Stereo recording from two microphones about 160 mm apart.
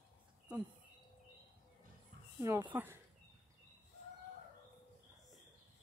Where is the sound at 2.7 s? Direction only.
15° right (ahead or behind).